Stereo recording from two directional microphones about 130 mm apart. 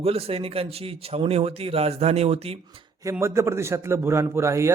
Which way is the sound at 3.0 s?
20° right (ahead or behind).